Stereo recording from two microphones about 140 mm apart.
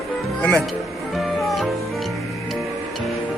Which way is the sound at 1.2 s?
Centre (ahead or behind).